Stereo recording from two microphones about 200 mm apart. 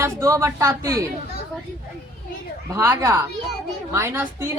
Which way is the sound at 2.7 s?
15° right (ahead or behind).